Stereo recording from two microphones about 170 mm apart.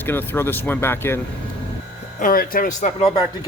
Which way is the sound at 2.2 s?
55° left (ahead or behind).